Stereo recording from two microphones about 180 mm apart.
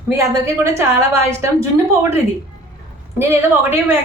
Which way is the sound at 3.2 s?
15° right (ahead or behind).